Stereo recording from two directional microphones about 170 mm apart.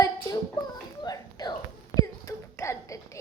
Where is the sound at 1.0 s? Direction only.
25° left (ahead or behind).